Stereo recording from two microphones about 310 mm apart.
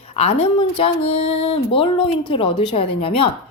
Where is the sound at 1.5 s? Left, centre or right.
Centre.